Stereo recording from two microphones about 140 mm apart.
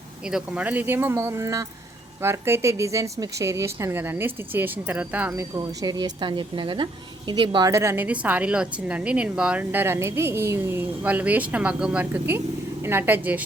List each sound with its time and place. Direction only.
0.3 s a woman's voice: 5° right (ahead or behind)
5.3 s speech: 25° right (ahead or behind)
7.7 s a woman's voice: 20° right (ahead or behind)